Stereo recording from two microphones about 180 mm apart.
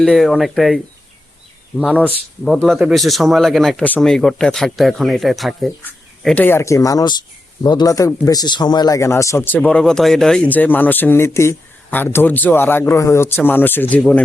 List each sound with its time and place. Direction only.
0.0 s speech: centre (ahead or behind)
1.8 s speech: 5° left (ahead or behind)
5.8 s speech: 10° left (ahead or behind)